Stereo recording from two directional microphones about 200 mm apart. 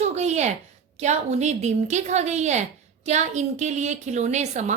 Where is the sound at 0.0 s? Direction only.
35° right (ahead or behind).